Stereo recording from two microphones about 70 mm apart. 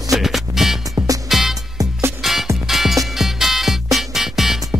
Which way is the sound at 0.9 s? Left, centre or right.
Right.